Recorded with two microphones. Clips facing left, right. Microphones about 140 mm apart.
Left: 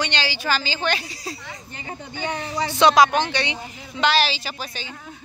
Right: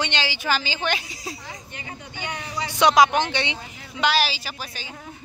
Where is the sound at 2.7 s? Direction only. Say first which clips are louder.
Left 1 dB; 15° right (ahead or behind).